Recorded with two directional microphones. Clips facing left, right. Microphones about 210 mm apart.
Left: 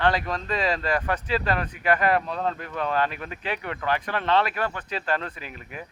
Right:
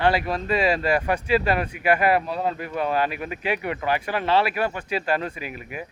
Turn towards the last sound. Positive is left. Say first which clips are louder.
# right 3 dB
turn(degrees=-10)  # may be behind; listen again after turning